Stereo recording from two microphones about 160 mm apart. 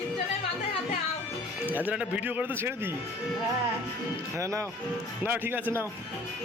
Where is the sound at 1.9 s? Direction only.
10° right (ahead or behind).